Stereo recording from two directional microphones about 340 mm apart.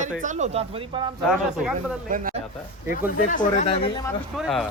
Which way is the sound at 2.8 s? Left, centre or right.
Left.